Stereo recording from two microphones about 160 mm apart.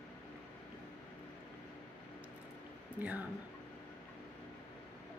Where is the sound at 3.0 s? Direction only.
10° right (ahead or behind).